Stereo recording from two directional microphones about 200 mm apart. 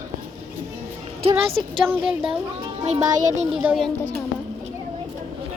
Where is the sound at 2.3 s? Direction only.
20° right (ahead or behind).